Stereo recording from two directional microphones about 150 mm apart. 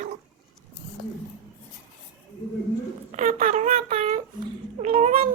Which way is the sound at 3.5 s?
45° right (ahead or behind).